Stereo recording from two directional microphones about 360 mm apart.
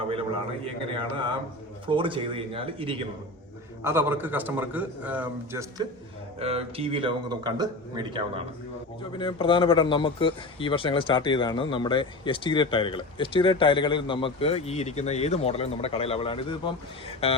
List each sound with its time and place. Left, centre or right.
0.1 s a sound: centre
1.9 s a man's voice: centre
9.1 s speech: centre